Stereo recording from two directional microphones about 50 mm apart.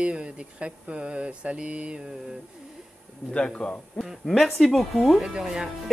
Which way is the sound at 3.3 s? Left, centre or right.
Left.